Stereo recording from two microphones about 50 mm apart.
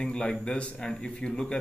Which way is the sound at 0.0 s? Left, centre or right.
Centre.